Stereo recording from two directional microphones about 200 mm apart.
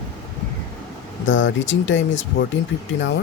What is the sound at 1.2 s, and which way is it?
Speech, 70° left (ahead or behind).